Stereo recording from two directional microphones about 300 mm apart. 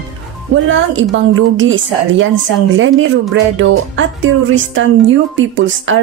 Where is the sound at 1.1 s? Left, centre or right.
Right.